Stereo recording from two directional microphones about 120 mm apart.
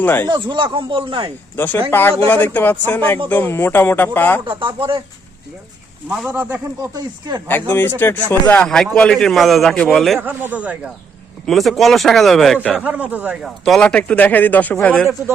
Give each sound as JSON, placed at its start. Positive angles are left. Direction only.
{"t": 0.0, "sound": "speech", "side_deg": 15}
{"t": 0.3, "sound": "speech", "side_deg": -40}
{"t": 1.5, "sound": "speech", "side_deg": 15}
{"t": 4.4, "sound": "speech", "side_deg": -40}
{"t": 6.3, "sound": "speech", "side_deg": -15}
{"t": 6.9, "sound": "speech", "side_deg": -35}
{"t": 7.7, "sound": "a man's voice", "side_deg": 20}
{"t": 10.2, "sound": "speech", "side_deg": -15}
{"t": 11.4, "sound": "a man's voice", "side_deg": 0}
{"t": 12.7, "sound": "speech", "side_deg": -10}
{"t": 13.4, "sound": "speech", "side_deg": 0}